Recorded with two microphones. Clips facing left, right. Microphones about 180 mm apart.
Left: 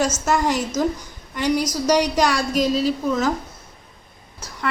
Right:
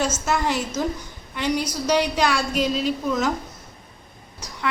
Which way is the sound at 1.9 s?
10° left (ahead or behind).